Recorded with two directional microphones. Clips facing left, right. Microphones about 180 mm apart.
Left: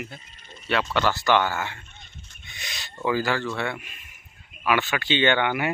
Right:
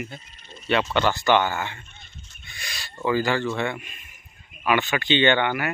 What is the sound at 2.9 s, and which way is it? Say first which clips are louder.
Speech: right 2 dB; 5° left (ahead or behind).